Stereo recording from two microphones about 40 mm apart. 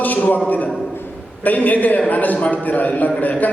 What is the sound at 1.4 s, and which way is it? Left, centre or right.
A man's voice, left.